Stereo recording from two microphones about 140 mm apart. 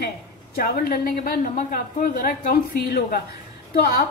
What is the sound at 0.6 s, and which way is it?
A woman's voice, 90° left.